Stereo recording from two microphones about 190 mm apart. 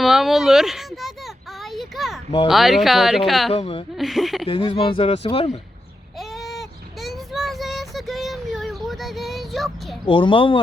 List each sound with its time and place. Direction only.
0.0 s speech: centre (ahead or behind)
1.6 s a sound: centre (ahead or behind)
2.5 s a woman's voice: centre (ahead or behind)
3.5 s a woman's voice: 30° left (ahead or behind)
3.9 s a woman's voice: centre (ahead or behind)
4.4 s speech: 25° left (ahead or behind)
6.1 s child singing: centre (ahead or behind)
10.1 s speech: 25° left (ahead or behind)